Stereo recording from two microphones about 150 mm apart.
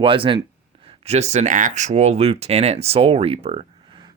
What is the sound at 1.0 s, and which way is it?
Speech, 45° right (ahead or behind).